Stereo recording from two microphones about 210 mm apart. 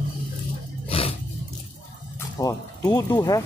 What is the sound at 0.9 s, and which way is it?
Vehicle, 25° left (ahead or behind).